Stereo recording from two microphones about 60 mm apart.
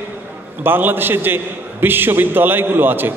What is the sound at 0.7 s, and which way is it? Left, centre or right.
A man's voice, right.